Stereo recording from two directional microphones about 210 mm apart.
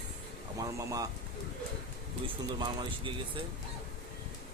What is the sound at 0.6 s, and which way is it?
Speech, 15° right (ahead or behind).